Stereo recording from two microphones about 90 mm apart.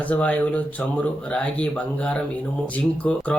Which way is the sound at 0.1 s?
15° left (ahead or behind).